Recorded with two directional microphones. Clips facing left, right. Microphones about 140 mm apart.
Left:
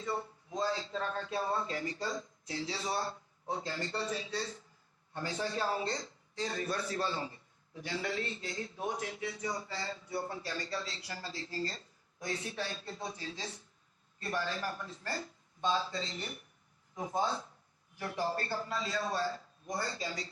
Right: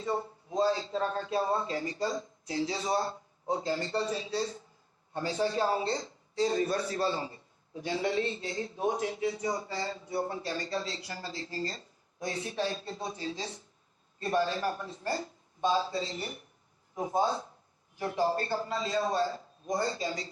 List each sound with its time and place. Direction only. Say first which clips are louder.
0.0 s a man's voice: right 5 dB; 20° right (ahead or behind)
3.7 s a man's voice: right 5 dB; 35° right (ahead or behind)
5.2 s a man's voice: right 6 dB; 20° right (ahead or behind)